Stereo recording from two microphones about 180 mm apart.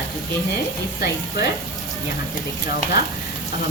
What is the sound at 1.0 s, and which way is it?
Speech, 60° left (ahead or behind).